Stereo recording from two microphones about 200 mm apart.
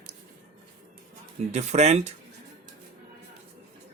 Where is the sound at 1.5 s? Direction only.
35° right (ahead or behind).